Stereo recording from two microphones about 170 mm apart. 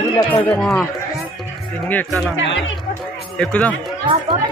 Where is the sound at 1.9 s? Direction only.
5° left (ahead or behind).